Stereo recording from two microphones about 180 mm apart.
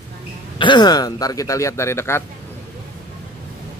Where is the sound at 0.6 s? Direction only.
25° left (ahead or behind).